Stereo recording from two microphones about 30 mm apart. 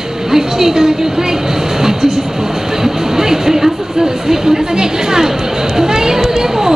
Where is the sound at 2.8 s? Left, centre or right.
Centre.